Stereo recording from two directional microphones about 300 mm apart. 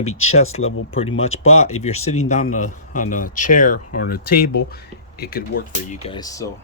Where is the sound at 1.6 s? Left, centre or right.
Left.